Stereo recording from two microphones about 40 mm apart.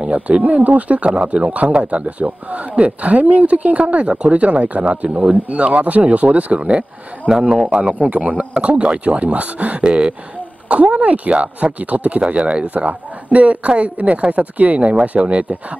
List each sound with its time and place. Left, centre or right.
0.0 s speech: right
1.1 s speech: right
7.2 s speech: centre
7.7 s speech: right